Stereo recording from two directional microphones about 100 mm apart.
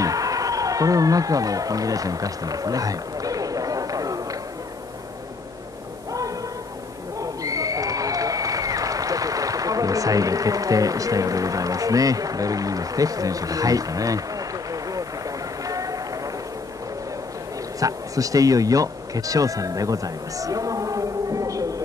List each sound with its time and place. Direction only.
0.0 s a sound: 35° right (ahead or behind)
7.2 s applause: 35° right (ahead or behind)
17.7 s speech: 35° right (ahead or behind)